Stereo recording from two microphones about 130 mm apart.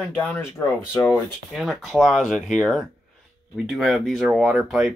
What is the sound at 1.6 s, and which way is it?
Speech, centre (ahead or behind).